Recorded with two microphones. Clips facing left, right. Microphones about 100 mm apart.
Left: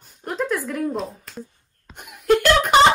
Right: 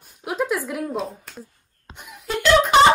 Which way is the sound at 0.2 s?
5° right (ahead or behind).